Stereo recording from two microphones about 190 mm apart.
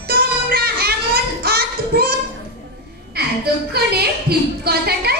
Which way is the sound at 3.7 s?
55° right (ahead or behind).